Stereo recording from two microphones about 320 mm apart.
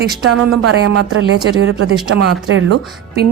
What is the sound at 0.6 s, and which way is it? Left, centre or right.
Speech, right.